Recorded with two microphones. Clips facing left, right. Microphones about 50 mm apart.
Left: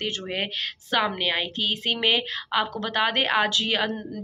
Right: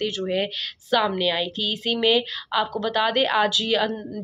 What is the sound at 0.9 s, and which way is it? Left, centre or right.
Speech, left.